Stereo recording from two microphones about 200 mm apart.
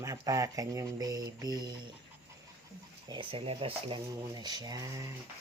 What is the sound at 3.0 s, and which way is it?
Speech, 25° right (ahead or behind).